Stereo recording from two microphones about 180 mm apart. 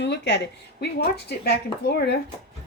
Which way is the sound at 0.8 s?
65° left (ahead or behind).